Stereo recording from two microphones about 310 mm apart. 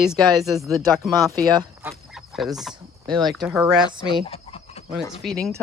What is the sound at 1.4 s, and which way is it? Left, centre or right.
Speech, centre.